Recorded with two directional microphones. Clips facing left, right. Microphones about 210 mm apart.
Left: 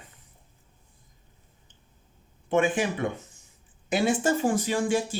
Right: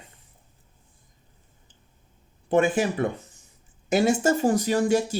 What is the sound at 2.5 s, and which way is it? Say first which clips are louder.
Speech: right 3 dB; 40° right (ahead or behind).